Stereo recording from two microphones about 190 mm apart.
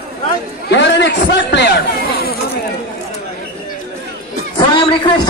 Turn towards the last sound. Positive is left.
turn(degrees=25)  # may be behind; listen again after turning